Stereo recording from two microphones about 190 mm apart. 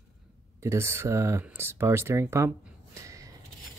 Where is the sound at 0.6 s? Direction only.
15° right (ahead or behind).